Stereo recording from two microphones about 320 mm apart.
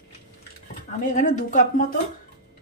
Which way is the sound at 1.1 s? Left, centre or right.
Left.